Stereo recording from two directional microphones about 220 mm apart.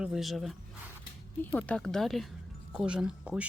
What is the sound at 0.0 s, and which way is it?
Speech, centre (ahead or behind).